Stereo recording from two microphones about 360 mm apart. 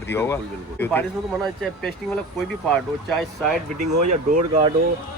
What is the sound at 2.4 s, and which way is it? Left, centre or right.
Speech, centre.